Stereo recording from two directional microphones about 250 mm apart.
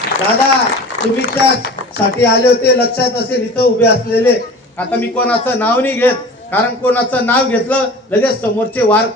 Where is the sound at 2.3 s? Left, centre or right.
Left.